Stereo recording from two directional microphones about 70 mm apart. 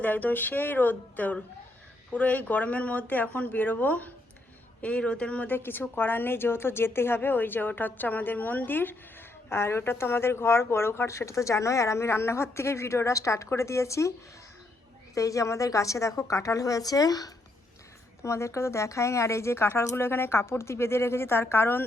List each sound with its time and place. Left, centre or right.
0.0 s a woman's voice: left
5.5 s a woman's voice: left
15.1 s a woman's voice: left
18.2 s speech: left